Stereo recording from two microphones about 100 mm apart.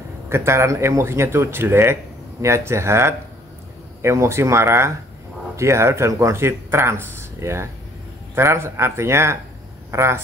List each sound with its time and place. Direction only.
0.3 s speech: 25° right (ahead or behind)